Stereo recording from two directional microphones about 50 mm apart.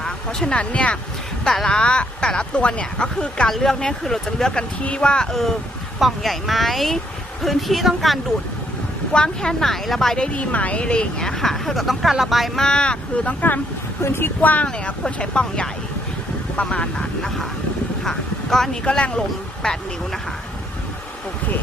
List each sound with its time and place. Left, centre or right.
0.0 s speech: centre
1.5 s speech: centre
4.8 s speech: left
5.3 s speech: centre
9.1 s speech: centre
10.2 s speech: left; by 12.5 s centre
12.5 s speech: centre
14.0 s speech: left
14.4 s speech: left
15.0 s speech: centre
18.9 s speech: left